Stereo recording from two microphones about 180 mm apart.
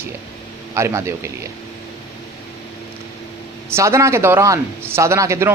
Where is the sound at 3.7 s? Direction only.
15° right (ahead or behind).